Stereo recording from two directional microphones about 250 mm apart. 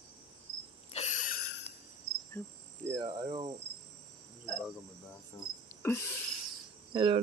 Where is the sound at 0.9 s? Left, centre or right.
Left.